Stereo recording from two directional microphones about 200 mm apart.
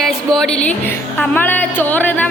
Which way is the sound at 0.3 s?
5° left (ahead or behind).